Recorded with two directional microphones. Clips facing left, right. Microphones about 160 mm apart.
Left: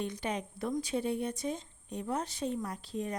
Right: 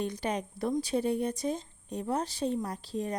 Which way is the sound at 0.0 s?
40° right (ahead or behind).